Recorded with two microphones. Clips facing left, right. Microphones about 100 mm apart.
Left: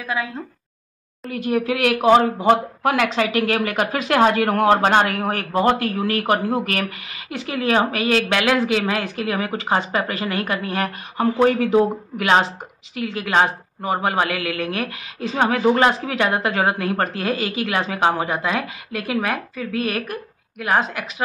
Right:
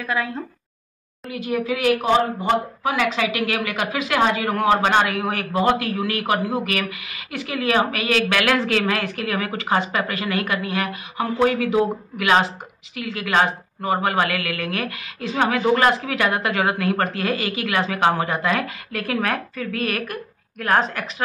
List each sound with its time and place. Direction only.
1.3 s speech: 50° left (ahead or behind)
3.3 s a woman's voice: 40° left (ahead or behind); by 20.2 s 20° left (ahead or behind)
20.5 s a woman's voice: 10° left (ahead or behind)